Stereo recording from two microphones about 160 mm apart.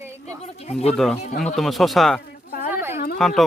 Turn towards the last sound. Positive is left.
turn(degrees=5)  # may be behind; listen again after turning